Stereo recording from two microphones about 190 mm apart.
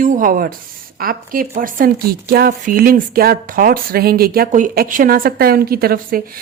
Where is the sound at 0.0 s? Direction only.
45° right (ahead or behind).